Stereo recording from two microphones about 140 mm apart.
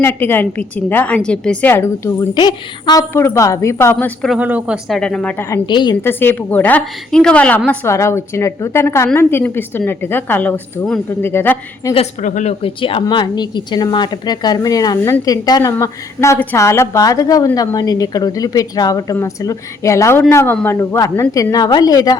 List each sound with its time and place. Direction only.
0.0 s a woman's voice: 15° left (ahead or behind)
2.3 s a woman's voice: 30° left (ahead or behind)
4.4 s speech: 10° right (ahead or behind)
4.9 s a woman's voice: 5° left (ahead or behind)
5.5 s a woman's voice: 30° left (ahead or behind)
6.0 s a woman's voice: 15° left (ahead or behind)
12.2 s speech: 60° left (ahead or behind)
12.6 s a woman's voice: 40° left (ahead or behind)